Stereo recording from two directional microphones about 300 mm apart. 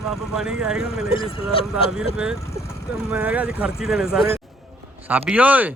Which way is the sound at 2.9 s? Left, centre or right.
Centre.